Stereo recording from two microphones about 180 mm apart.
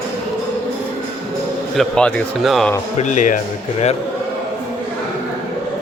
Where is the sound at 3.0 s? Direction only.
45° left (ahead or behind).